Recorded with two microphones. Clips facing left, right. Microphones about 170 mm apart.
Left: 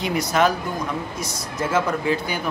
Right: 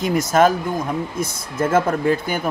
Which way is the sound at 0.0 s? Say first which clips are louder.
Right 4 dB; 45° right (ahead or behind).